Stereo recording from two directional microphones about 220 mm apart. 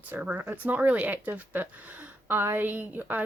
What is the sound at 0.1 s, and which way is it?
Speech, 5° right (ahead or behind).